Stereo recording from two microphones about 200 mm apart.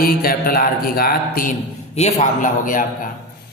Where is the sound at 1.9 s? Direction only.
35° left (ahead or behind).